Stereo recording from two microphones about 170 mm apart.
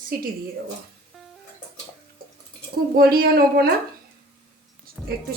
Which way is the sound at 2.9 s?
60° right (ahead or behind).